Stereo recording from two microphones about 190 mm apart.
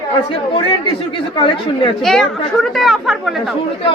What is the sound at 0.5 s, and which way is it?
A woman's voice, 25° left (ahead or behind).